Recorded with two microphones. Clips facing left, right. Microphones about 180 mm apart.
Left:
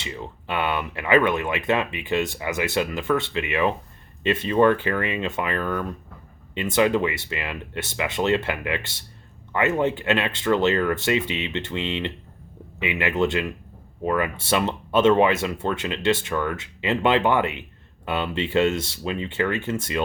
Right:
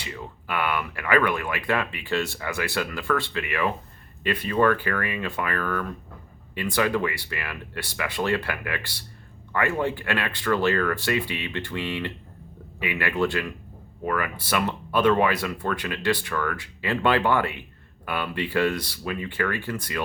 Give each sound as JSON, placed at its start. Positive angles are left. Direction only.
{"t": 0.0, "sound": "speech", "side_deg": 25}